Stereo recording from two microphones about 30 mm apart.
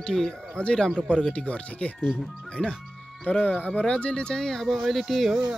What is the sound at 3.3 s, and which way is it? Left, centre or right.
Speech, left.